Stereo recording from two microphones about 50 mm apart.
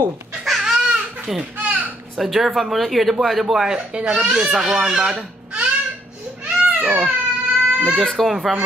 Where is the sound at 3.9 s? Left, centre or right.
Right.